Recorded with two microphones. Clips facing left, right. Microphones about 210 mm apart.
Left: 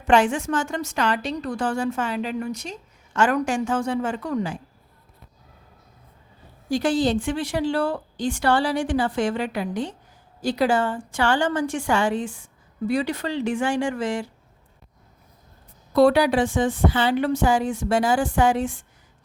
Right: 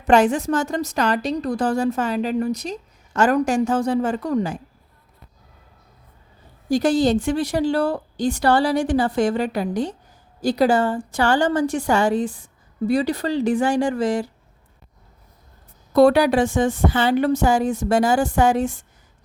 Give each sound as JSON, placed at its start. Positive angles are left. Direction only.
{"t": 0.0, "sound": "a woman's voice", "side_deg": -40}
{"t": 6.7, "sound": "a woman's voice", "side_deg": -40}
{"t": 16.0, "sound": "a woman's voice", "side_deg": -45}